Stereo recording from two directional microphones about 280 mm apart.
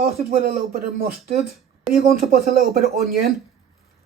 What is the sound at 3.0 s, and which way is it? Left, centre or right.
Speech, right.